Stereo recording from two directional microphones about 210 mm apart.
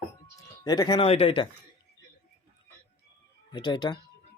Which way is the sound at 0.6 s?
20° left (ahead or behind).